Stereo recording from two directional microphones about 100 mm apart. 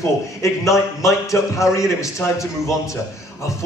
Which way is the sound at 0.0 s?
30° left (ahead or behind).